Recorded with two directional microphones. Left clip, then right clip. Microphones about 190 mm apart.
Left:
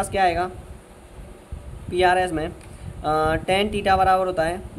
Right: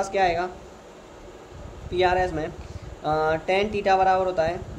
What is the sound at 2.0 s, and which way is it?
Speech, 25° left (ahead or behind).